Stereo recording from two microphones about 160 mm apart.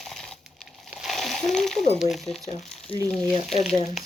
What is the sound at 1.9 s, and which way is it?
Speech, centre (ahead or behind).